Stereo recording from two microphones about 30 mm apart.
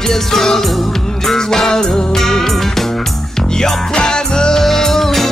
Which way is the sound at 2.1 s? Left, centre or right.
Centre.